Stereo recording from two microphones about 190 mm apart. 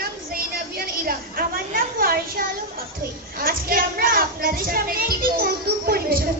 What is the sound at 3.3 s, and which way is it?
Music, 50° right (ahead or behind).